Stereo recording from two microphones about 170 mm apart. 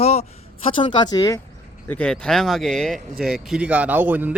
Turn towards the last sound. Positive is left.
turn(degrees=-10)  # may be behind; listen again after turning